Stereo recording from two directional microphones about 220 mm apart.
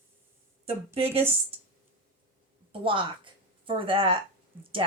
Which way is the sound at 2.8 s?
20° right (ahead or behind).